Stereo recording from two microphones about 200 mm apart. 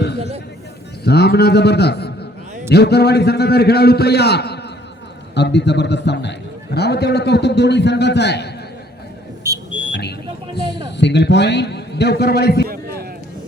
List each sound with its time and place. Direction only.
0.2 s speech: 30° right (ahead or behind)
1.0 s a man's voice: 55° left (ahead or behind)
9.5 s buzzer: 15° right (ahead or behind)
10.0 s a sound: 55° left (ahead or behind)
10.9 s a man's voice: 60° left (ahead or behind)
12.6 s a sound: 50° right (ahead or behind)